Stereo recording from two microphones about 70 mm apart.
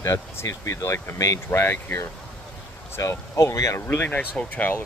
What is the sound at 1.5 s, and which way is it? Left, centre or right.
Speech, left.